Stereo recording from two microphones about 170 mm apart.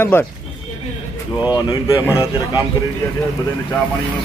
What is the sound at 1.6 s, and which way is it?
Speech, 25° left (ahead or behind).